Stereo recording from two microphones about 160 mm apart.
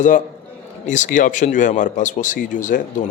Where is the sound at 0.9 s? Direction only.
50° left (ahead or behind).